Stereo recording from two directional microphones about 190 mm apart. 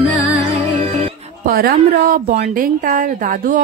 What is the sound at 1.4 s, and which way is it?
A woman's voice, 50° right (ahead or behind).